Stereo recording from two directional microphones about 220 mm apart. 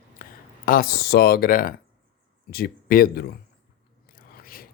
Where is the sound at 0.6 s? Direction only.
40° left (ahead or behind).